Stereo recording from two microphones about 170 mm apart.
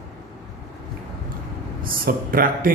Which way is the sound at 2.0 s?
55° right (ahead or behind).